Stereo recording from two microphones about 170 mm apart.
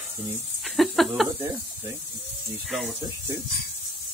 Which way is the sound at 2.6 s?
Centre (ahead or behind).